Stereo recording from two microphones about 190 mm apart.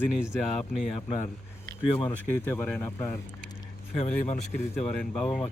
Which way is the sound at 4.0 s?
35° left (ahead or behind).